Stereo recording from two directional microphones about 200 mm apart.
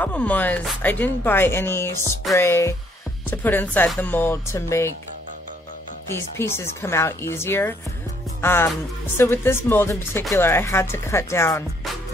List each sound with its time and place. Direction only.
0.0 s speech: 5° left (ahead or behind)
6.0 s speech: 15° left (ahead or behind)
8.4 s music: 10° left (ahead or behind)
9.1 s speech: 10° left (ahead or behind)